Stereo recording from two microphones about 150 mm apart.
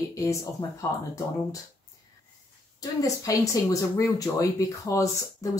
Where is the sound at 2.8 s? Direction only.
25° left (ahead or behind).